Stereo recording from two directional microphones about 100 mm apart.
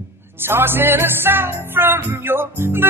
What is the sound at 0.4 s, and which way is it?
Music, 20° right (ahead or behind).